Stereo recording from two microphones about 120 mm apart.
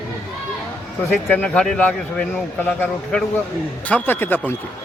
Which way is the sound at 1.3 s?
10° left (ahead or behind).